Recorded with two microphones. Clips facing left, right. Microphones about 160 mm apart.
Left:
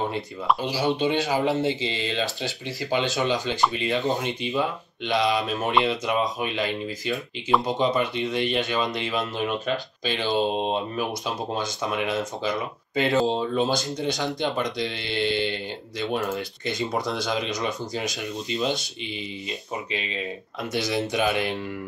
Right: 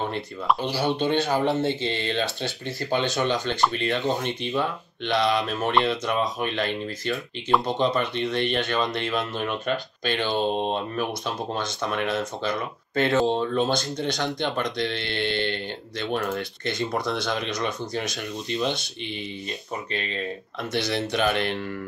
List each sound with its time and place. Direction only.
0.9 s speech: centre (ahead or behind)
20.8 s speech: 15° left (ahead or behind)